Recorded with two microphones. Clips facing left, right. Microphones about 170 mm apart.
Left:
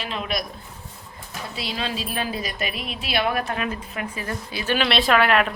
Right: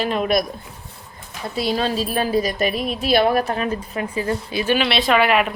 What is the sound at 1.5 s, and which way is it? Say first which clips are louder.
Speech: right 9 dB; 45° right (ahead or behind).